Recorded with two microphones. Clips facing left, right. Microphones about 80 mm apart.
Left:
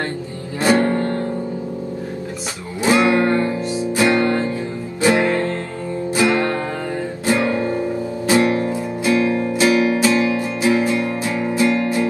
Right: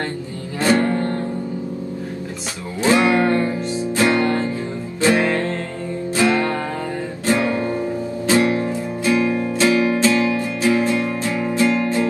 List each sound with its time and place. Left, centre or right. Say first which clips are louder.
0.6 s music: left 1 dB; centre
2.8 s music: even; centre
8.3 s music: left 1 dB; left